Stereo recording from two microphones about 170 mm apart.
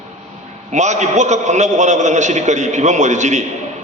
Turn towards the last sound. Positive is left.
turn(degrees=-45)  # may be behind; listen again after turning